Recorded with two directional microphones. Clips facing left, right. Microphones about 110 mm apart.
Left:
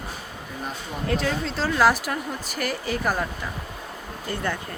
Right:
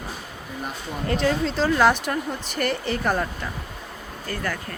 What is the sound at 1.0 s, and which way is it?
Speech, centre (ahead or behind).